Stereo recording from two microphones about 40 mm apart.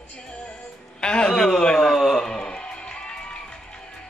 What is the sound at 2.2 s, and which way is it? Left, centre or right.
Music, centre.